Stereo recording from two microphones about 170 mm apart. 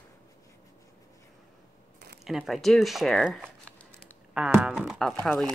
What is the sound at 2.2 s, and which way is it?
Speech, centre (ahead or behind).